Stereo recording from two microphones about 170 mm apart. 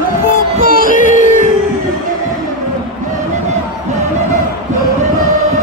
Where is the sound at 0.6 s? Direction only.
55° left (ahead or behind).